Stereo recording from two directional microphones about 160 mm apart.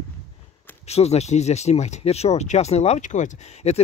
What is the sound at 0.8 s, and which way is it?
Speech, 40° left (ahead or behind).